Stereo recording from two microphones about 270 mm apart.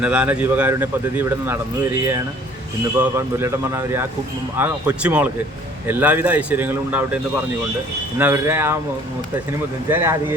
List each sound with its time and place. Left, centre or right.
0.0 s a man's voice: centre
3.0 s speech: centre
8.2 s speech: centre
9.9 s speech: centre